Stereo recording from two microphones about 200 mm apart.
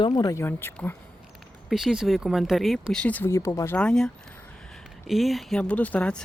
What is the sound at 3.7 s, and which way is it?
Speech, 5° left (ahead or behind).